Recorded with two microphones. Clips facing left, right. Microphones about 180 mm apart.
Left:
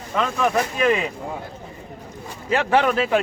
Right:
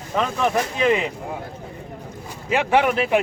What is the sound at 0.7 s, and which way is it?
Speech, 20° right (ahead or behind).